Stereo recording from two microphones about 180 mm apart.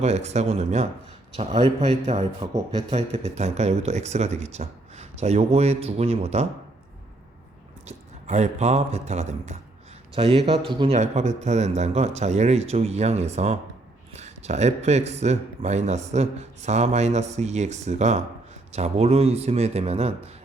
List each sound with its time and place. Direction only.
0.0 s a man's voice: 35° right (ahead or behind)
2.4 s speech: 25° right (ahead or behind)
2.9 s a man's voice: 35° right (ahead or behind)
7.9 s a man's voice: 40° right (ahead or behind)